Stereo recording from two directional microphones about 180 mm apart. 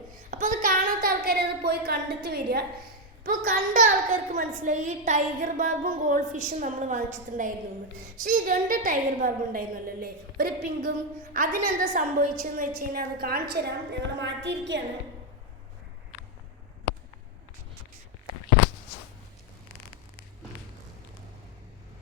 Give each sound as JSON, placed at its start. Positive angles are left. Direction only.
{"t": 0.3, "sound": "a sound", "side_deg": -45}
{"t": 3.2, "sound": "a woman's voice", "side_deg": -50}
{"t": 14.2, "sound": "a woman's voice", "side_deg": -75}